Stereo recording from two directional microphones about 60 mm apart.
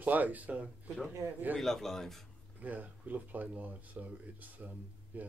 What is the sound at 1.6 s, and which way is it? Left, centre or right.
Speech, centre.